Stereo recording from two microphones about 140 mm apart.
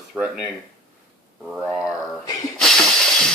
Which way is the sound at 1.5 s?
5° right (ahead or behind).